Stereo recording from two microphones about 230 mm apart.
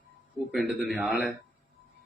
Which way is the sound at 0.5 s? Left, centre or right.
Centre.